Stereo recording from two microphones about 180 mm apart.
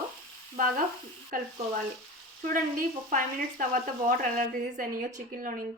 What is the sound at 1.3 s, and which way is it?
Speech, 50° right (ahead or behind).